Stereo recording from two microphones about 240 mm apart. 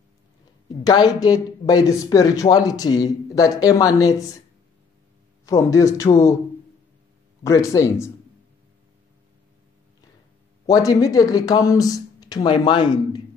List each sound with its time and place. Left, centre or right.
0.8 s speech: centre
5.4 s speech: centre
7.4 s speech: centre
10.7 s speech: centre